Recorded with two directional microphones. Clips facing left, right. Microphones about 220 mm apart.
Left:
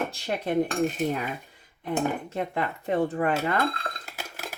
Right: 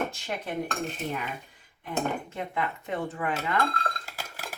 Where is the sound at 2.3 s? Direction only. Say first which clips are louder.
Left 3 dB; 35° left (ahead or behind).